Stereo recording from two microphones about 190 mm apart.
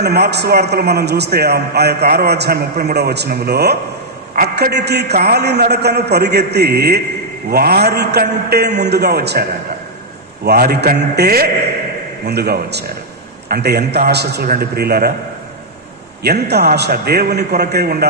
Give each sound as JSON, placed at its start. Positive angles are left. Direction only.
{"t": 0.0, "sound": "a man's voice", "side_deg": -60}
{"t": 16.2, "sound": "a man's voice", "side_deg": -60}